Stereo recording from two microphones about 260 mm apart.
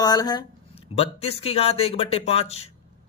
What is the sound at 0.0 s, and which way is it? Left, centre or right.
Speech, centre.